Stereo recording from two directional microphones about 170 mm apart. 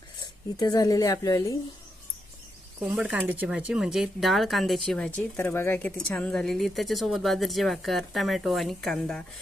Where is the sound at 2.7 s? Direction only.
5° right (ahead or behind).